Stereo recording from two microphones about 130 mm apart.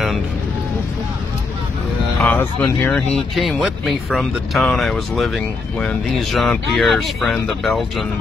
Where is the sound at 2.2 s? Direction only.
15° left (ahead or behind).